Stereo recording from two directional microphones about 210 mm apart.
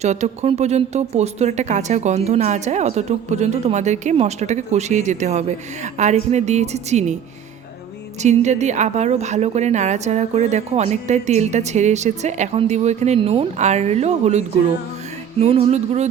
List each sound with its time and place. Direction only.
0.0 s speech: 30° right (ahead or behind)
8.2 s speech: 35° right (ahead or behind)
15.4 s a sound: 30° right (ahead or behind)